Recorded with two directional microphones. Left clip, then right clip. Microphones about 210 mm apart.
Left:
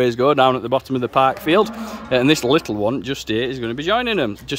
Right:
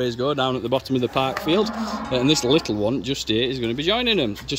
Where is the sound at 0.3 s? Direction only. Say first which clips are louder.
Left 9 dB; 45° left (ahead or behind).